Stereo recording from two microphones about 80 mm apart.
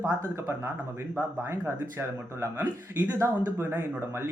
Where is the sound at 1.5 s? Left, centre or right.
Right.